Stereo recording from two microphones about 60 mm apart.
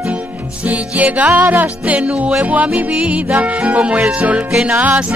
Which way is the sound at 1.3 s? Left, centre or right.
Right.